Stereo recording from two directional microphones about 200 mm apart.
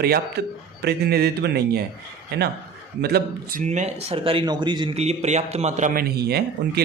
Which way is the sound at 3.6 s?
35° right (ahead or behind).